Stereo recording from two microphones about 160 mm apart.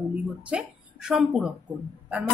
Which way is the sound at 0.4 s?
5° right (ahead or behind).